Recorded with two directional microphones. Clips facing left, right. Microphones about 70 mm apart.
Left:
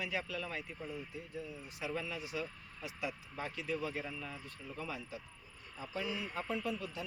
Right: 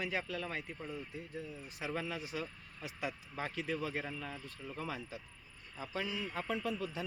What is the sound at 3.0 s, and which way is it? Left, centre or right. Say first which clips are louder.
Speech: right 1 dB; right.